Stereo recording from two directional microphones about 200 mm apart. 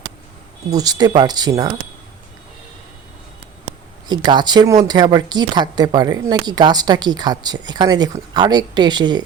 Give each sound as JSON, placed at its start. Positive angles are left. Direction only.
{"t": 0.7, "sound": "speech", "side_deg": -20}
{"t": 4.1, "sound": "speech", "side_deg": -20}